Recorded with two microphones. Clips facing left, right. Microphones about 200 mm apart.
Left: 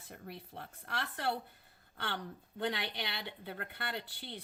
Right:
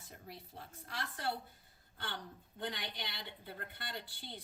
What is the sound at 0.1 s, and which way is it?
Speech, 60° left (ahead or behind).